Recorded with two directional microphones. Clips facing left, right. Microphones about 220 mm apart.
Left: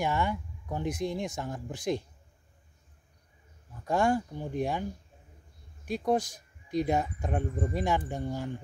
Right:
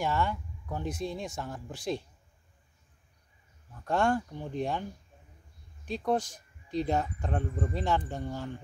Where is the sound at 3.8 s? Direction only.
10° left (ahead or behind).